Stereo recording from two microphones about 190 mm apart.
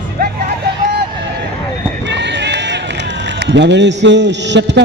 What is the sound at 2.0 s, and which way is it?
Run, 65° right (ahead or behind).